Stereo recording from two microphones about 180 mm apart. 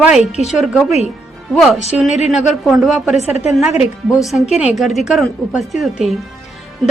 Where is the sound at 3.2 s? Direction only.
35° left (ahead or behind).